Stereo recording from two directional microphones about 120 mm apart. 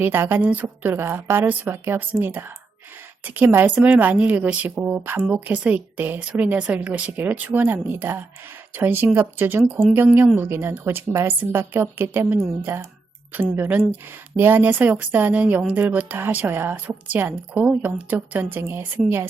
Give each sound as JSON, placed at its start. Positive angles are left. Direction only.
{"t": 0.0, "sound": "speech", "side_deg": -20}